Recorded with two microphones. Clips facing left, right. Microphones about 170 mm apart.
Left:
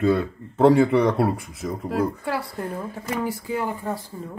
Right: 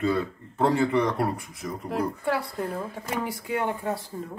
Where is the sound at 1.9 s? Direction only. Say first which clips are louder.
Left 1 dB; 5° left (ahead or behind).